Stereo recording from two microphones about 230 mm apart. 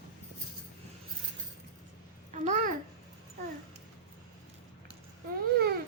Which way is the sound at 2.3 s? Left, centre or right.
Right.